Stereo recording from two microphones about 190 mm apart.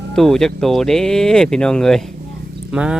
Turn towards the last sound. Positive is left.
turn(degrees=-5)  # may be behind; listen again after turning